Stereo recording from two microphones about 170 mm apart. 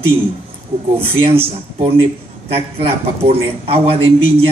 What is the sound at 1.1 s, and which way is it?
Speech, 35° right (ahead or behind).